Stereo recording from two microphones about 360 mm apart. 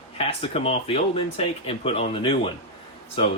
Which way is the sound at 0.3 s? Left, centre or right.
Centre.